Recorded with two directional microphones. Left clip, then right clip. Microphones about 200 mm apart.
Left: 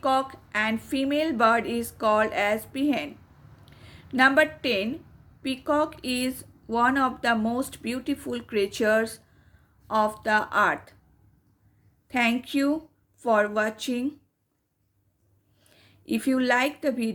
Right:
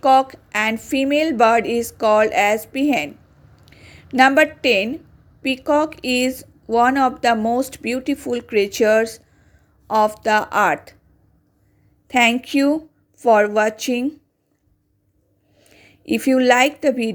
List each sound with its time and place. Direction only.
0.0 s speech: 30° right (ahead or behind)
12.0 s speech: 35° right (ahead or behind)
15.5 s a woman's voice: 30° right (ahead or behind)